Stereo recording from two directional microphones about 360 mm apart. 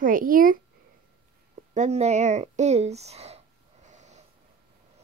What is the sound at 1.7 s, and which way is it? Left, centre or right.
Speech, centre.